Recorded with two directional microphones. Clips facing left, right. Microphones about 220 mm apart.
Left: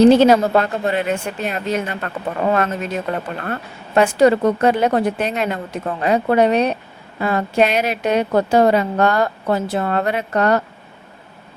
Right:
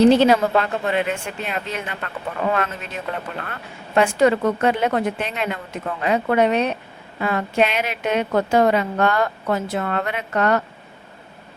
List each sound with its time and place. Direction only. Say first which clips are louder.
0.0 s a woman's voice: left 3 dB; 45° left (ahead or behind)